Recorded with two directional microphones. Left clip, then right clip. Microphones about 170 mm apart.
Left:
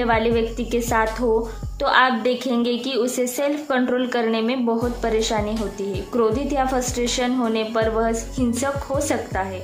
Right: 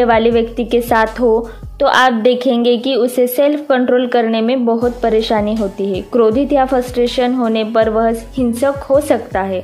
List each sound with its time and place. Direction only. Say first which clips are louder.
0.0 s a woman's voice: right 8 dB; 35° right (ahead or behind)